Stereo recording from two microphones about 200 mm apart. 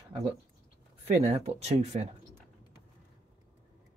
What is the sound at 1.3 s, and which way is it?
Speech, 30° right (ahead or behind).